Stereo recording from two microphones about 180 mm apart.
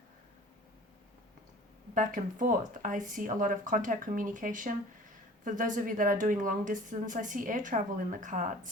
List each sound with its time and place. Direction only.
2.0 s a woman's voice: 45° right (ahead or behind)